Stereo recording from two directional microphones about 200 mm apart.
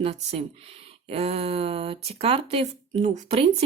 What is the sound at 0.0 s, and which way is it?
A woman's voice, 30° right (ahead or behind).